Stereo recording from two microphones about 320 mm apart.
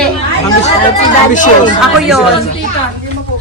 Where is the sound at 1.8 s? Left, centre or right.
Centre.